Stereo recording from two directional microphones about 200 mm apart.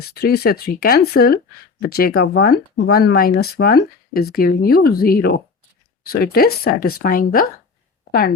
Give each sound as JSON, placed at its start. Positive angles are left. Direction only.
{"t": 0.1, "sound": "speech", "side_deg": 50}